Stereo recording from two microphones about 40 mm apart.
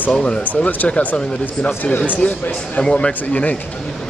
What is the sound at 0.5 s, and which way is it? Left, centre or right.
Speech, left.